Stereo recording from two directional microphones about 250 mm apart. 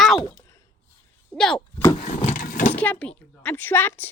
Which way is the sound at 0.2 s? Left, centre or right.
Centre.